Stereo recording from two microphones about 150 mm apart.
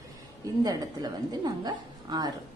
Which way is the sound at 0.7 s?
25° right (ahead or behind).